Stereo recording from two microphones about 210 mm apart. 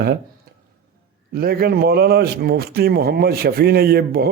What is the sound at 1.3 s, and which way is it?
A man's voice, 45° right (ahead or behind).